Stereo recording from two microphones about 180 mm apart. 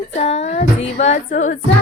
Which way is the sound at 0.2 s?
40° left (ahead or behind).